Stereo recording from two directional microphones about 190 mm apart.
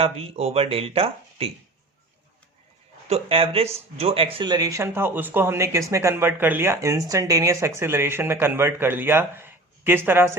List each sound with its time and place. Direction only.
0.0 s speech: 30° right (ahead or behind)
3.1 s speech: 30° right (ahead or behind); by 10.3 s 10° right (ahead or behind)